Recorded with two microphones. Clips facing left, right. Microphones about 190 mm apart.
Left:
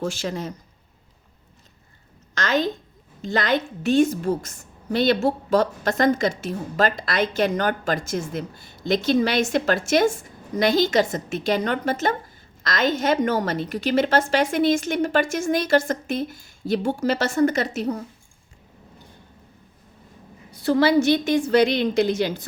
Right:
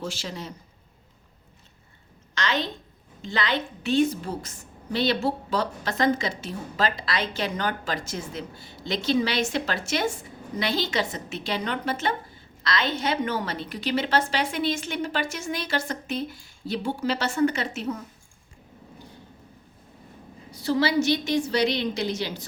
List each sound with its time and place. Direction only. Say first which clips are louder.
0.0 s a woman's voice: left 7 dB; 50° left (ahead or behind)
2.3 s a woman's voice: left 5 dB; 45° left (ahead or behind)
20.5 s a woman's voice: left 5 dB; 55° left (ahead or behind)